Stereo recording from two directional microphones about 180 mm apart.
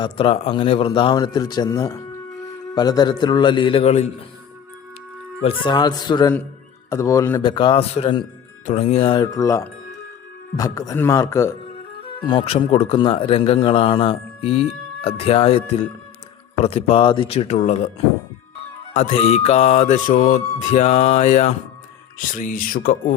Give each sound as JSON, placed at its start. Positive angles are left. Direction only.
{"t": 0.0, "sound": "a man's voice", "side_deg": 30}
{"t": 5.4, "sound": "a man's voice", "side_deg": 30}
{"t": 8.6, "sound": "music", "side_deg": 35}
{"t": 9.1, "sound": "a man's voice", "side_deg": 20}
{"t": 12.2, "sound": "a man's voice", "side_deg": 25}
{"t": 16.6, "sound": "music", "side_deg": 35}
{"t": 18.9, "sound": "music", "side_deg": 40}
{"t": 22.4, "sound": "speech", "side_deg": 50}